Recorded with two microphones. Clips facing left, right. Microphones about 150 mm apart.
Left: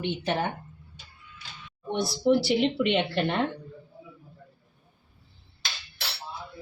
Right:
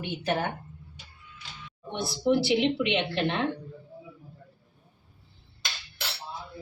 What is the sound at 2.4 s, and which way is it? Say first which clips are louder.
Speech: even; 45° left (ahead or behind).